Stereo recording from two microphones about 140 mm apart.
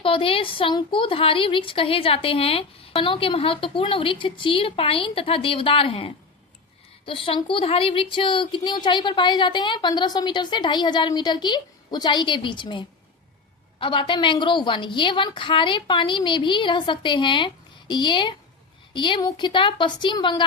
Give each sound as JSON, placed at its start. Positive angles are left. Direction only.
{"t": 0.0, "sound": "a woman's voice", "side_deg": 40}